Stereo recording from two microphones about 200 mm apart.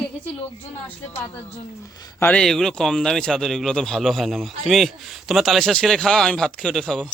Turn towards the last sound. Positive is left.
turn(degrees=0)  # may be behind; listen again after turning